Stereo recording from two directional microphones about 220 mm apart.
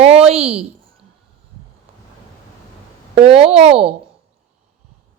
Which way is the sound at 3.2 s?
25° right (ahead or behind).